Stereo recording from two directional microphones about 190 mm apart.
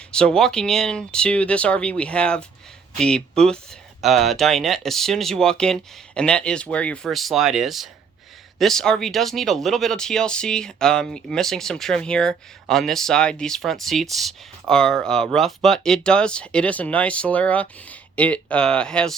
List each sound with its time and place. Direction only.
0.1 s speech: 5° left (ahead or behind)